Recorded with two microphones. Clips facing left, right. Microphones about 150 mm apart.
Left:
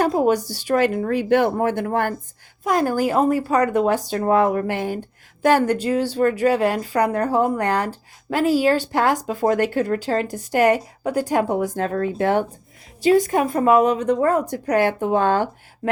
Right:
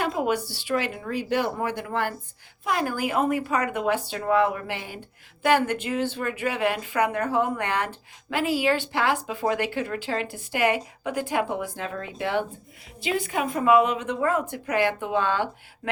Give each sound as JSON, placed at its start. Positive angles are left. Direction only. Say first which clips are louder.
{"t": 0.0, "sound": "speech", "louder": "left 7 dB", "side_deg": 40}